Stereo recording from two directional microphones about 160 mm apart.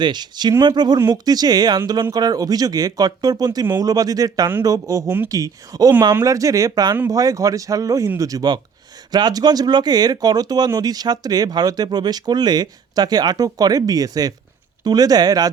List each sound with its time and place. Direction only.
0.0 s speech: 25° right (ahead or behind)